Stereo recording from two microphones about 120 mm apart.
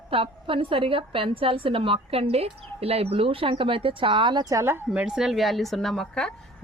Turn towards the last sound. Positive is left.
turn(degrees=5)  # may be behind; listen again after turning